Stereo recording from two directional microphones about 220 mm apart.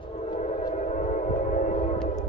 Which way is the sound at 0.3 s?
30° left (ahead or behind).